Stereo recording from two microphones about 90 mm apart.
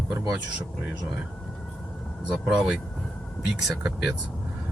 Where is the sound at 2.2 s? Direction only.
10° right (ahead or behind).